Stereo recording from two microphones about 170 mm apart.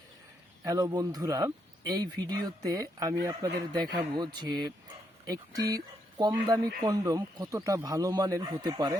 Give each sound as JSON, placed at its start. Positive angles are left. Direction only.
{"t": 0.6, "sound": "speech", "side_deg": -20}